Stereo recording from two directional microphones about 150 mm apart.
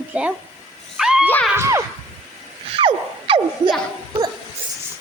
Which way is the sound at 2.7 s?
35° right (ahead or behind).